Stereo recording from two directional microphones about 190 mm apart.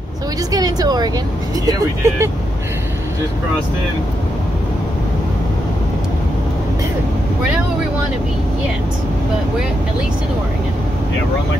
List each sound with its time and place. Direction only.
0.5 s speech: 20° right (ahead or behind)